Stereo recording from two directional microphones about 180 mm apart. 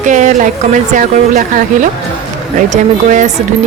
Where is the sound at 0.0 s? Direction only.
45° right (ahead or behind).